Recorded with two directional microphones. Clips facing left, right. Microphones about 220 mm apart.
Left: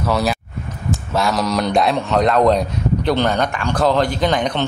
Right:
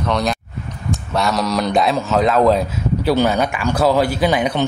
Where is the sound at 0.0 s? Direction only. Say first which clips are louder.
Left 1 dB; 5° left (ahead or behind).